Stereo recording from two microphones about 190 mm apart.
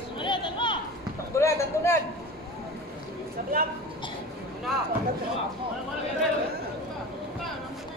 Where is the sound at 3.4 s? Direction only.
45° right (ahead or behind).